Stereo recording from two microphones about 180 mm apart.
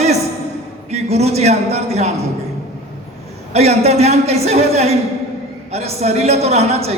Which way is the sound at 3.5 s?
35° right (ahead or behind).